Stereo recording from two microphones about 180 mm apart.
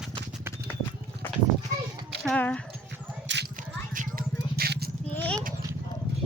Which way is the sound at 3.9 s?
50° right (ahead or behind).